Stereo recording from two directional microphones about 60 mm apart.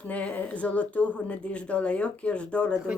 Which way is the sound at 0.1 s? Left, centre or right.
Left.